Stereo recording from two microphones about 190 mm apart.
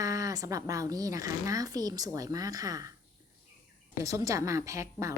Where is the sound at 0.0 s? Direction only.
15° right (ahead or behind).